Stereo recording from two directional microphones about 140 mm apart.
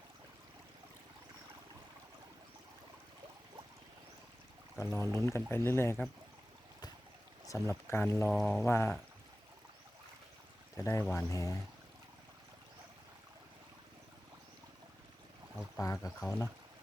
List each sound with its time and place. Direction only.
4.8 s speech: 20° left (ahead or behind)
5.0 s speech: 25° right (ahead or behind)
5.3 s speech: 15° left (ahead or behind)
7.4 s speech: 20° left (ahead or behind)
8.3 s pour: 5° left (ahead or behind)
8.6 s speech: 15° left (ahead or behind)
10.8 s speech: 20° left (ahead or behind)
15.8 s speech: 20° left (ahead or behind)